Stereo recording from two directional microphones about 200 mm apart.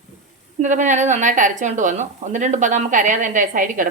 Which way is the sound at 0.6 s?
40° right (ahead or behind).